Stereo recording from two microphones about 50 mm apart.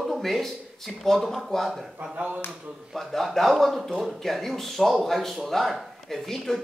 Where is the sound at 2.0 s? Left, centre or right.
Right.